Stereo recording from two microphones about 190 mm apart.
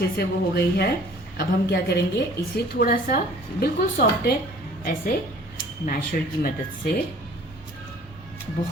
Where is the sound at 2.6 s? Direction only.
55° left (ahead or behind).